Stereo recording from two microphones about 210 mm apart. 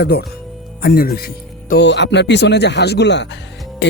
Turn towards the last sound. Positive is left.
turn(degrees=55)  # may be behind; listen again after turning